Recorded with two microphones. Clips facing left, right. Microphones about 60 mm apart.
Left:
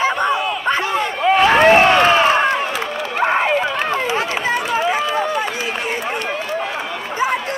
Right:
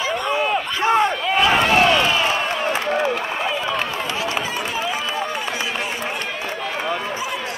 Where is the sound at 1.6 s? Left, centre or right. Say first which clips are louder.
Left 5 dB; left.